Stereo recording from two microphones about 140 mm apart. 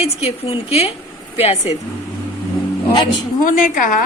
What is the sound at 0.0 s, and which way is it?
A woman's voice, 45° left (ahead or behind).